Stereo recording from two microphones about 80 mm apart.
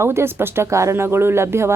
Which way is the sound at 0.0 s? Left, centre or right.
Right.